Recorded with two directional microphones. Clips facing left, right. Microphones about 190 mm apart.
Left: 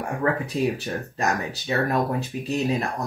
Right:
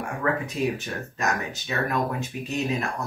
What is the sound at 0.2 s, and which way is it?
Speech, 35° left (ahead or behind).